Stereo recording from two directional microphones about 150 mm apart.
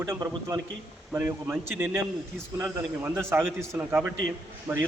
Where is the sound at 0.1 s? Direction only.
20° right (ahead or behind).